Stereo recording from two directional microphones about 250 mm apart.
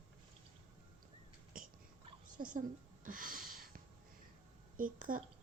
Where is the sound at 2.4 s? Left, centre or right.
Right.